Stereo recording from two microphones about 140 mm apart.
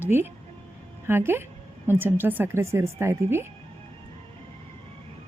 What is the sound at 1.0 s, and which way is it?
A woman's voice, 15° right (ahead or behind).